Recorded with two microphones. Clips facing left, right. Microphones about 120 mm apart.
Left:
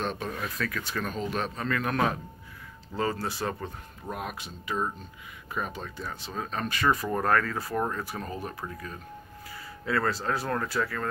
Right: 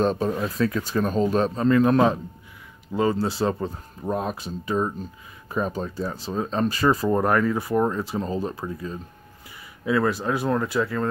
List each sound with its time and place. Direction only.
0.0 s speech: 35° right (ahead or behind)
7.2 s speech: 20° right (ahead or behind)